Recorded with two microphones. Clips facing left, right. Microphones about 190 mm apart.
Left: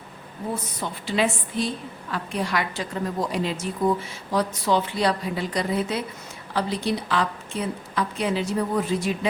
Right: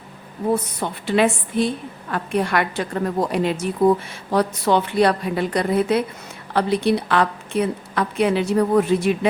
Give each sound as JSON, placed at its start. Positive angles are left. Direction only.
{"t": 0.8, "sound": "a woman's voice", "side_deg": -60}